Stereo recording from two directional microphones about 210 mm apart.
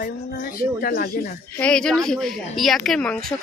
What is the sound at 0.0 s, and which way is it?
Speech, 45° left (ahead or behind).